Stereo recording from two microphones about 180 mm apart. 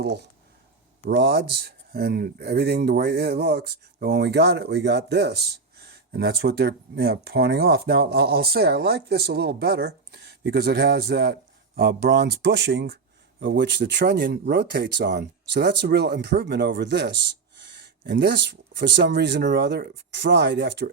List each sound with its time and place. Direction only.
0.0 s speech: 65° right (ahead or behind)